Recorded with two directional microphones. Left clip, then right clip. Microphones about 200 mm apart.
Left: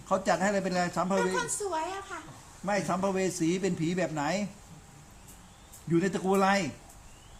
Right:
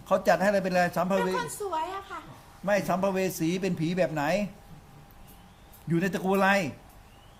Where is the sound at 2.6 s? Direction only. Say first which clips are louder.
Right 3 dB; 40° right (ahead or behind).